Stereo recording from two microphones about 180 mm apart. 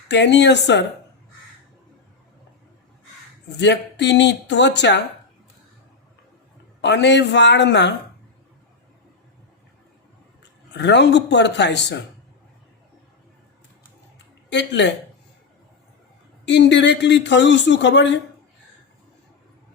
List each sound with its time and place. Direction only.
0.1 s speech: 75° left (ahead or behind)
3.6 s speech: 75° left (ahead or behind)
6.8 s speech: 75° left (ahead or behind)
10.8 s speech: 75° left (ahead or behind)
14.5 s speech: 75° left (ahead or behind)
16.5 s speech: 75° left (ahead or behind)